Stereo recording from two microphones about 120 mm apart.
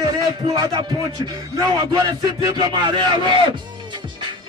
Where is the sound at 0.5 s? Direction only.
35° right (ahead or behind).